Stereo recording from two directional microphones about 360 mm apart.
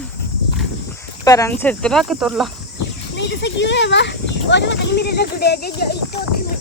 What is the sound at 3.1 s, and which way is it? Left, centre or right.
Speech, left.